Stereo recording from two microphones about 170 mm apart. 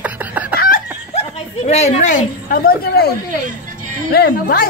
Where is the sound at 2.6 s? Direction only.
65° left (ahead or behind).